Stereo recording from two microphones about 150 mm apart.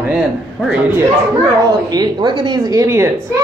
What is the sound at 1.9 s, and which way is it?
Speech, 30° right (ahead or behind).